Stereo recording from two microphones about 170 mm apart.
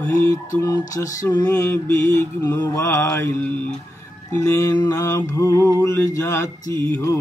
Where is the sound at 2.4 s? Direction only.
15° left (ahead or behind).